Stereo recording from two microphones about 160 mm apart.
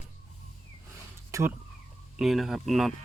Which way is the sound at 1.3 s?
15° right (ahead or behind).